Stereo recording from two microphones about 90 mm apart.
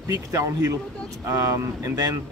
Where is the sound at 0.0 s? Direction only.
40° right (ahead or behind).